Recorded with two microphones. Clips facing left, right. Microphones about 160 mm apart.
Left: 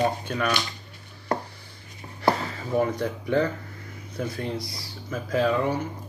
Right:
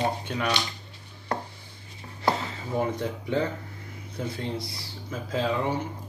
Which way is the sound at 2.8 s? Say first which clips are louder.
Left 2 dB; 20° right (ahead or behind).